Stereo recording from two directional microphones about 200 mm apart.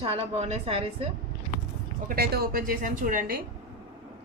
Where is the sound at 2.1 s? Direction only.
50° right (ahead or behind).